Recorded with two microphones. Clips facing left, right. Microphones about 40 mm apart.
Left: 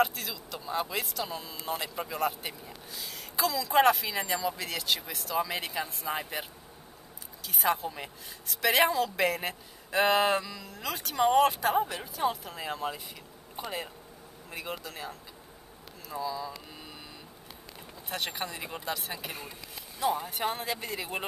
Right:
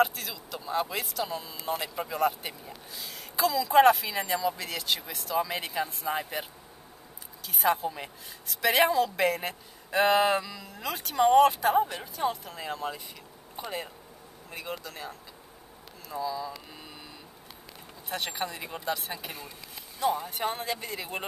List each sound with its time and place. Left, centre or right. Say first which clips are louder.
0.0 s a woman's voice: right 2 dB; centre
7.4 s a woman's voice: right 2 dB; centre
18.1 s a woman's voice: right 2 dB; centre